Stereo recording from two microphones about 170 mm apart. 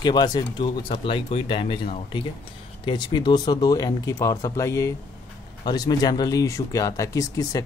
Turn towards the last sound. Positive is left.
turn(degrees=20)  # may be behind; listen again after turning